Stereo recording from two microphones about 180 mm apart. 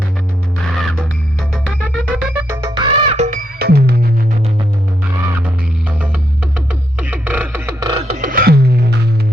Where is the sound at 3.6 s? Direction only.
60° right (ahead or behind).